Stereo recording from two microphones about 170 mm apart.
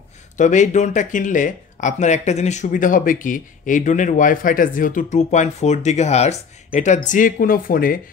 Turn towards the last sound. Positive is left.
turn(degrees=55)  # may be behind; listen again after turning